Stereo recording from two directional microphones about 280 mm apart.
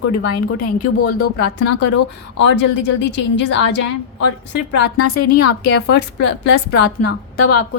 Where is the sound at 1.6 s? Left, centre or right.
Left.